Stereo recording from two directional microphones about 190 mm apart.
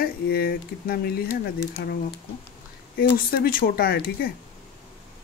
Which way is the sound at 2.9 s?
55° left (ahead or behind).